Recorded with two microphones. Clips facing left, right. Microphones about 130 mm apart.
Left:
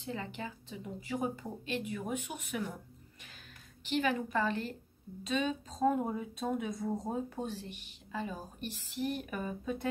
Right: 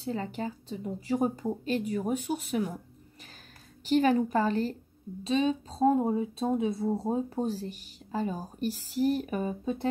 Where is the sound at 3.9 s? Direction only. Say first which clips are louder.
Right 8 dB; 40° right (ahead or behind).